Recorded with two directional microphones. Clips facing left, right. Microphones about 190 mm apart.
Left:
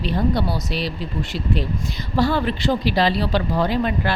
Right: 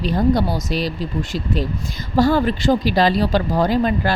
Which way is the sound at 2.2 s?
45° right (ahead or behind).